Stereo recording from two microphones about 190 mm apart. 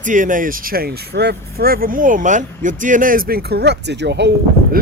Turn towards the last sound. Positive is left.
turn(degrees=-65)  # may be behind; listen again after turning